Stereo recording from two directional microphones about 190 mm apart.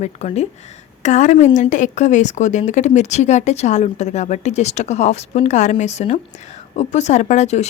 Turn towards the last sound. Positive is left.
turn(degrees=35)  # may be behind; listen again after turning